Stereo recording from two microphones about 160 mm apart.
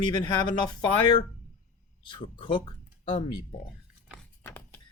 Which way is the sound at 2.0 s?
30° left (ahead or behind).